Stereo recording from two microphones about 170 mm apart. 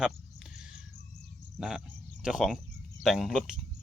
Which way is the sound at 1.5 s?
Centre (ahead or behind).